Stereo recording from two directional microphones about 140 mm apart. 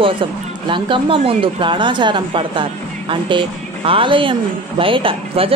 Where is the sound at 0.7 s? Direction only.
35° right (ahead or behind).